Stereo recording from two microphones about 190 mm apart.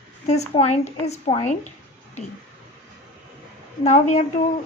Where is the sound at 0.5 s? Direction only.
35° left (ahead or behind).